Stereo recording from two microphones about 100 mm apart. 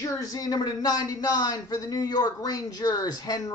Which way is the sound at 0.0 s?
35° left (ahead or behind).